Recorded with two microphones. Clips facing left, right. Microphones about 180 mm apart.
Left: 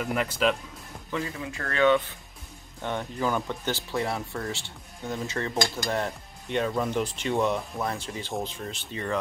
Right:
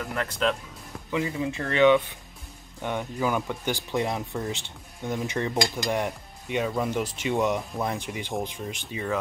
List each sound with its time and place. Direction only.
0.0 s speech: 15° left (ahead or behind)
0.3 s speech: 5° left (ahead or behind)
1.1 s speech: 20° right (ahead or behind)